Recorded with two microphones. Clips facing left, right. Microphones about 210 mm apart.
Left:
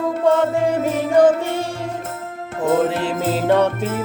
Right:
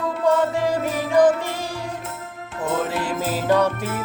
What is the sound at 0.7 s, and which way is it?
Music, 25° left (ahead or behind).